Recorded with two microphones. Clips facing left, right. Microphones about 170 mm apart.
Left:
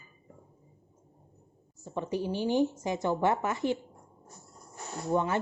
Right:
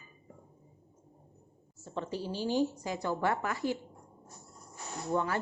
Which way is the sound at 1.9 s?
15° left (ahead or behind).